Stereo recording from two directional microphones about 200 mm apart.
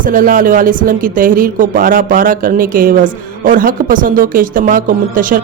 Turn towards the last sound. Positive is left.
turn(degrees=-40)  # may be behind; listen again after turning